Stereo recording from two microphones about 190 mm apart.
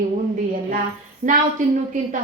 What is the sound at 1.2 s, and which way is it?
Speech, 45° right (ahead or behind).